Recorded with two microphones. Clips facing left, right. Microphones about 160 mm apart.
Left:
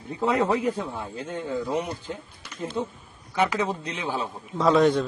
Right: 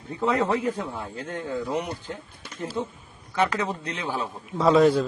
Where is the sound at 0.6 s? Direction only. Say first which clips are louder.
Left 1 dB; 10° left (ahead or behind).